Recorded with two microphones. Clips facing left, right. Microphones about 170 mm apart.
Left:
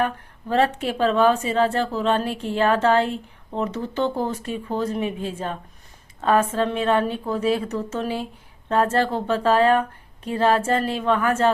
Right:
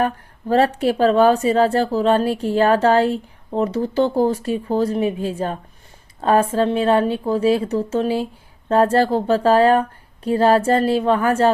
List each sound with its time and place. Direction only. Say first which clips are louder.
0.0 s a woman's voice: right 3 dB; 40° right (ahead or behind)